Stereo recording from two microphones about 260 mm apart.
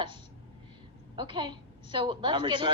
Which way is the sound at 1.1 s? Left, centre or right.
Centre.